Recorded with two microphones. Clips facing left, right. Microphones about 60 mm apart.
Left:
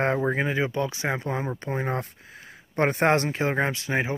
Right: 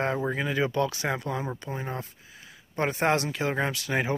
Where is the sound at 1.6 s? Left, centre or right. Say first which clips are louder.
Left 6 dB; left.